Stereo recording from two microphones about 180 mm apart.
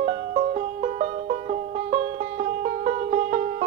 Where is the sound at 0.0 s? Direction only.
40° right (ahead or behind).